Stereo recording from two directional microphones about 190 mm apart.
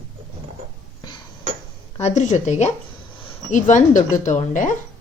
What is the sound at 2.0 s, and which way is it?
A woman's voice, 35° left (ahead or behind).